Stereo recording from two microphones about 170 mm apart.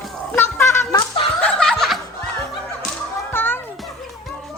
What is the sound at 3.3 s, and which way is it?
Children playing, 10° left (ahead or behind).